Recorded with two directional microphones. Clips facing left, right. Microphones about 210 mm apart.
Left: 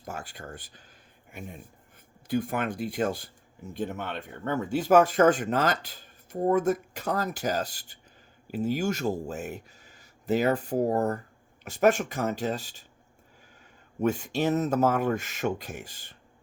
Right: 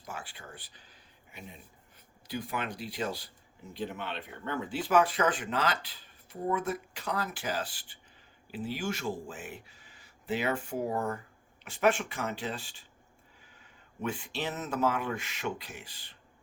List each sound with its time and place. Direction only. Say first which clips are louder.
0.0 s speech: left 5 dB; 45° left (ahead or behind)
14.0 s speech: left 9 dB; 45° left (ahead or behind)